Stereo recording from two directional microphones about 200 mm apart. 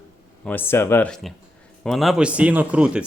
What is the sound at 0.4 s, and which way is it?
A man's voice, 10° left (ahead or behind).